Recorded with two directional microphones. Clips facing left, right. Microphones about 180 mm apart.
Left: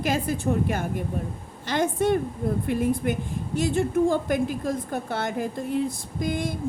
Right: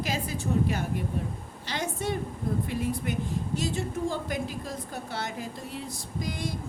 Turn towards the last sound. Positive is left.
turn(degrees=55)  # may be behind; listen again after turning